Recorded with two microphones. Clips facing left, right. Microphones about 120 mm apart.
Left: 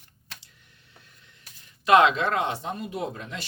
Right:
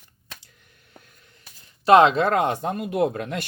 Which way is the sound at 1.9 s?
35° right (ahead or behind).